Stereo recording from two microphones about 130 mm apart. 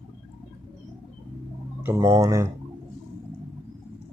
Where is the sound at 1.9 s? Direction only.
25° right (ahead or behind).